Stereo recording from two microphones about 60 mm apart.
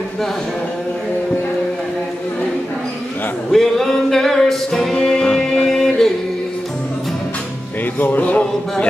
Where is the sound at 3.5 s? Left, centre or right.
Centre.